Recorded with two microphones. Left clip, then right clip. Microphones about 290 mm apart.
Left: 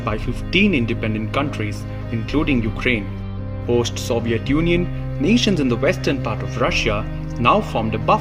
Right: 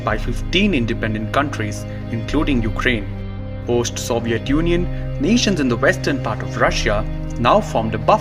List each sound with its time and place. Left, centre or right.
0.0 s speech: right